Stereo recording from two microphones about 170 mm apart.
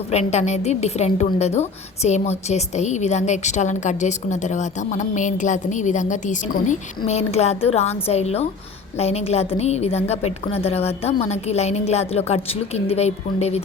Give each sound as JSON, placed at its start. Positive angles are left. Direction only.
{"t": 0.1, "sound": "a woman's voice", "side_deg": 40}